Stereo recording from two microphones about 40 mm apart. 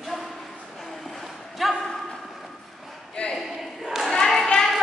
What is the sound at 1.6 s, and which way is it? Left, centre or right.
Speech, centre.